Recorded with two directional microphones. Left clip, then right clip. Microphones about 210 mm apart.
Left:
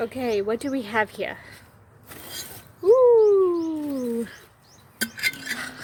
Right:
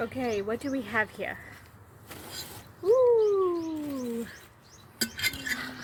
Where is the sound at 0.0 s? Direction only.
55° left (ahead or behind).